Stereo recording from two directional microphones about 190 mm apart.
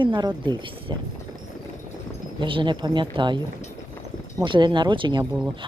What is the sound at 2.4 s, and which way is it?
Speech, 25° right (ahead or behind).